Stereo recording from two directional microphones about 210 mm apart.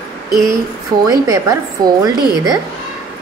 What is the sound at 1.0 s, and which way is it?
A woman's voice, 15° right (ahead or behind).